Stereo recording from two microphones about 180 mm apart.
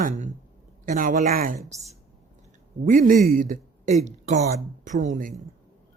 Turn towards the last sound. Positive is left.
turn(degrees=-45)  # may be behind; listen again after turning